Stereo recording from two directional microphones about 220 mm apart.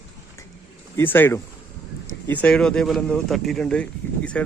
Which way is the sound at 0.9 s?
10° left (ahead or behind).